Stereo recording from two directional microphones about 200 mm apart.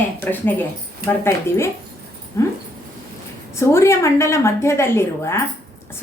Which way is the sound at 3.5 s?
15° left (ahead or behind).